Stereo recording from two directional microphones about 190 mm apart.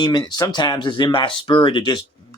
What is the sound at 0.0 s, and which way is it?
Speech, 25° left (ahead or behind).